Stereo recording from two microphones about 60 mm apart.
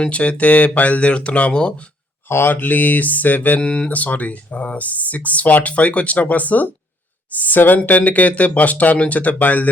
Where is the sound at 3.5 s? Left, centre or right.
Centre.